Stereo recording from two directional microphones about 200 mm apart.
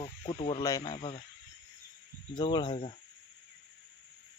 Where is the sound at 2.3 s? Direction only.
25° left (ahead or behind).